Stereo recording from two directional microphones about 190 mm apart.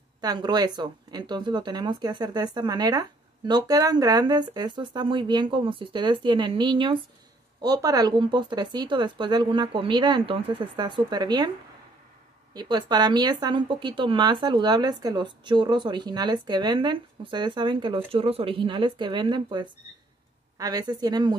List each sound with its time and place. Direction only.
0.2 s speech: 20° right (ahead or behind)
12.5 s speech: 20° right (ahead or behind)